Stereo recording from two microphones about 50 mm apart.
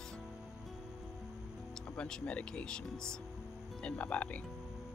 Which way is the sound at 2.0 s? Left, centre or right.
Centre.